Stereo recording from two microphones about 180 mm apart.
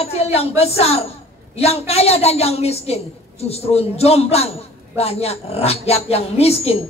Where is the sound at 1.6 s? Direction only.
35° left (ahead or behind).